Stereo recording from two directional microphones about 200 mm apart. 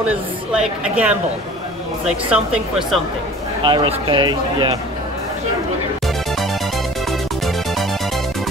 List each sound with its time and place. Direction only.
0.0 s a woman's voice: 5° right (ahead or behind)
3.6 s speech: 25° right (ahead or behind)